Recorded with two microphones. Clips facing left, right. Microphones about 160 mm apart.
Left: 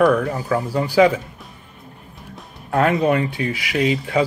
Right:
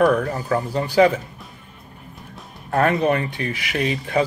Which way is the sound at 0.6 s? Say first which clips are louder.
Left 1 dB; 10° left (ahead or behind).